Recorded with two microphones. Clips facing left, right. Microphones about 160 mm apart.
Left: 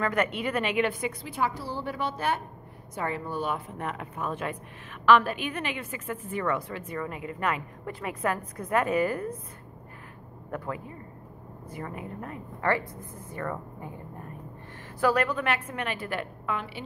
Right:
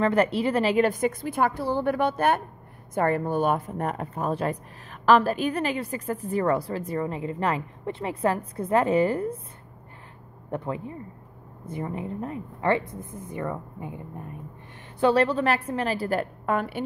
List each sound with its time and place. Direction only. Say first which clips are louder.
0.0 s a woman's voice: right 6 dB; 30° right (ahead or behind)
10.5 s a woman's voice: right 4 dB; 25° right (ahead or behind)
15.0 s a woman's voice: right 4 dB; 25° right (ahead or behind); by 16.8 s 50° right (ahead or behind)